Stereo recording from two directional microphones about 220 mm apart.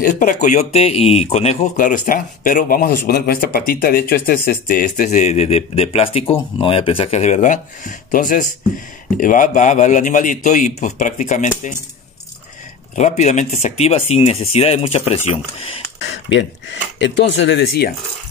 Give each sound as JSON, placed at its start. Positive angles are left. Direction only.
{"t": 0.0, "sound": "speech", "side_deg": 40}
{"t": 12.9, "sound": "speech", "side_deg": 30}
{"t": 16.0, "sound": "speech", "side_deg": 55}